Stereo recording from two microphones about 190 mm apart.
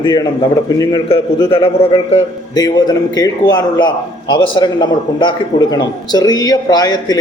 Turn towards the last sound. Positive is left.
turn(degrees=20)  # may be behind; listen again after turning